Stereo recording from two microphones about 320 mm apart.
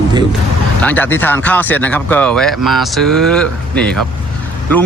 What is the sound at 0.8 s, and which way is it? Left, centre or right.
Speech, centre.